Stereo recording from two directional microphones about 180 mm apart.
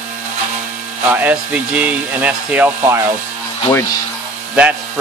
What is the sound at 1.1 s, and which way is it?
Speech, 10° right (ahead or behind).